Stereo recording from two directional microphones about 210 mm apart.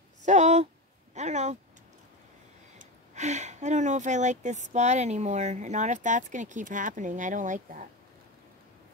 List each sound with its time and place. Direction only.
0.2 s a sound: 35° right (ahead or behind)
1.1 s speech: 35° right (ahead or behind)
2.8 s speech: 35° right (ahead or behind)